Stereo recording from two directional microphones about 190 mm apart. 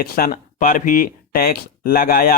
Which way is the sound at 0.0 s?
45° left (ahead or behind).